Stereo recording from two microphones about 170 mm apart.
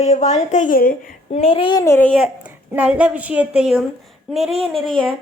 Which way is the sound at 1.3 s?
35° left (ahead or behind).